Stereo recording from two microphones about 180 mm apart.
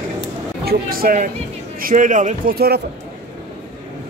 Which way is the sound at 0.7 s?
55° right (ahead or behind).